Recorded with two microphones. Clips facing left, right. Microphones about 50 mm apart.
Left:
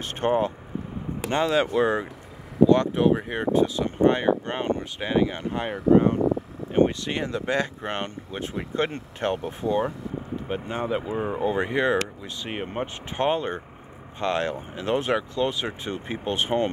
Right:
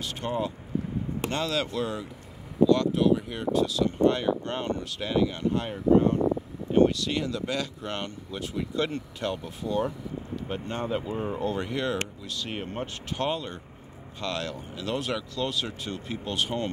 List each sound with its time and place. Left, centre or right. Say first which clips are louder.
0.0 s speech: left 7 dB; left
1.3 s speech: left 8 dB; left
10.5 s speech: left 3 dB; centre